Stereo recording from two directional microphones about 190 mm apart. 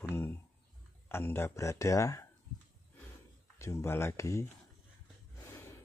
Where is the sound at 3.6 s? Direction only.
15° left (ahead or behind).